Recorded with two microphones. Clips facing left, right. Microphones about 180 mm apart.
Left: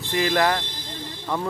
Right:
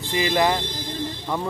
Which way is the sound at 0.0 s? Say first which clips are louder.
Even; centre (ahead or behind).